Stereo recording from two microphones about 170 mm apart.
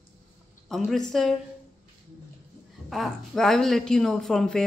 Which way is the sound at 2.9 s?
Centre (ahead or behind).